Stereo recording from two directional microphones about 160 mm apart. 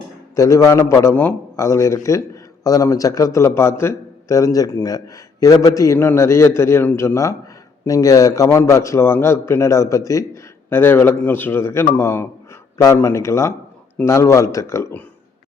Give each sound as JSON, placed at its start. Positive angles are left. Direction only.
{"t": 0.3, "sound": "a man's voice", "side_deg": 20}